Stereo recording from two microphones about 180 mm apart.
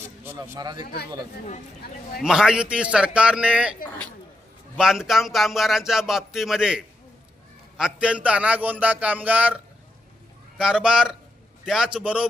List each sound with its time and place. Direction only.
0.3 s a man's voice: 15° right (ahead or behind)
2.2 s speech: 5° right (ahead or behind)
4.8 s a man's voice: 5° right (ahead or behind)
10.6 s a man's voice: 5° right (ahead or behind)